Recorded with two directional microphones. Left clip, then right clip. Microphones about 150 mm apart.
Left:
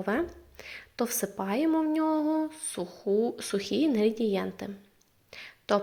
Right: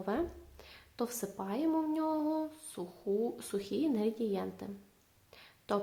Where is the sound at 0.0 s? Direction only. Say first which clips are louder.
Left 6 dB; 15° left (ahead or behind).